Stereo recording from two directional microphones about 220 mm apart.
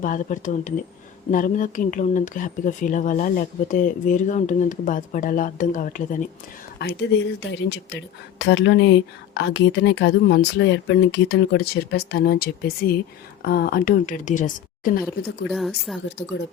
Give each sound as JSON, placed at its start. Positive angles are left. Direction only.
{"t": 0.0, "sound": "speech", "side_deg": 35}
{"t": 6.7, "sound": "a woman's voice", "side_deg": 50}
{"t": 15.0, "sound": "speech", "side_deg": 0}